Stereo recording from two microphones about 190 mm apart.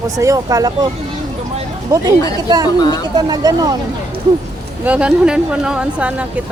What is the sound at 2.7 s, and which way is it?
Speech, 20° left (ahead or behind).